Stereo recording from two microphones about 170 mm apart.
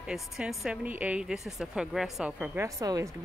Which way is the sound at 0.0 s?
5° right (ahead or behind).